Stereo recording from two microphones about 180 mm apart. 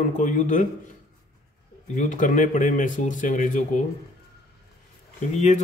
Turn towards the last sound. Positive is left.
turn(degrees=40)  # may be behind; listen again after turning